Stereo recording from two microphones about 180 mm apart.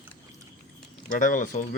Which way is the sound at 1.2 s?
45° left (ahead or behind).